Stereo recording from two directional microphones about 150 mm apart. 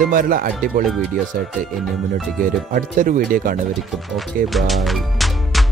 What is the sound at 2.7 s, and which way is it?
Speech, 70° right (ahead or behind).